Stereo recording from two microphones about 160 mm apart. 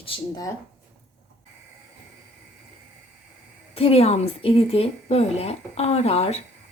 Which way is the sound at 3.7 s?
40° left (ahead or behind).